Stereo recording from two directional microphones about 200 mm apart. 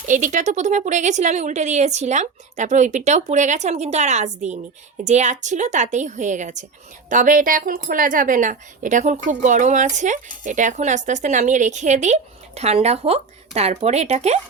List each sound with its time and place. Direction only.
0.1 s speech: 40° right (ahead or behind)